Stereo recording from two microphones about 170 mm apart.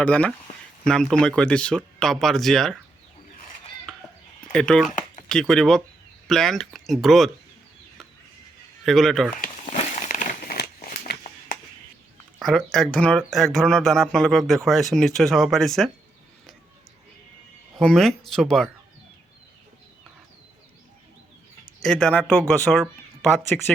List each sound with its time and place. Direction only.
0.0 s speech: 5° left (ahead or behind)
4.5 s speech: 5° left (ahead or behind)
8.8 s speech: centre (ahead or behind)
9.7 s crumpling: 40° left (ahead or behind)
10.1 s crumpling: 55° left (ahead or behind)
12.4 s speech: 5° left (ahead or behind)
17.7 s speech: centre (ahead or behind)
21.8 s speech: 5° left (ahead or behind)